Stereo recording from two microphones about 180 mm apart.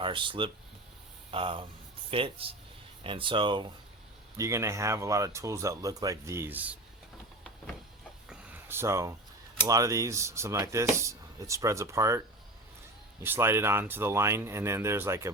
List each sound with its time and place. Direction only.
0.0 s speech: 25° right (ahead or behind)
4.4 s speech: 15° right (ahead or behind)
8.3 s a sound: 10° right (ahead or behind)
9.6 s speech: 20° right (ahead or behind)
13.2 s speech: 10° right (ahead or behind)